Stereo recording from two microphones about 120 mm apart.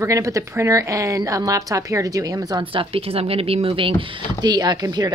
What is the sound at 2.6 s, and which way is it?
Speech, 45° right (ahead or behind).